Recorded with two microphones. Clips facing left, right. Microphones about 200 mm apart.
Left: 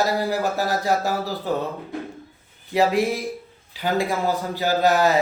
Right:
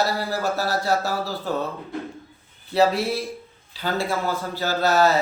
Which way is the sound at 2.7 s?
15° left (ahead or behind).